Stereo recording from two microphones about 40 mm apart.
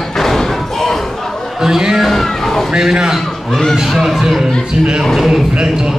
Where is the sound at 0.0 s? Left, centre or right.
Centre.